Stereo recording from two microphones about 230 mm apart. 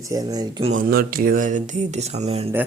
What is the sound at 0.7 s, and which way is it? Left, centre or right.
Speech, right.